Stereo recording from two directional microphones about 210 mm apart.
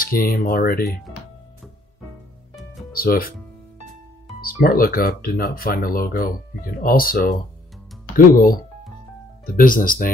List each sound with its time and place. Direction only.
0.0 s speech: 45° left (ahead or behind)
2.9 s speech: 45° left (ahead or behind)
4.4 s speech: 45° left (ahead or behind)